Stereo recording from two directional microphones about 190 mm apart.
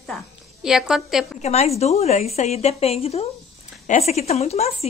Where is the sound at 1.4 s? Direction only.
35° left (ahead or behind).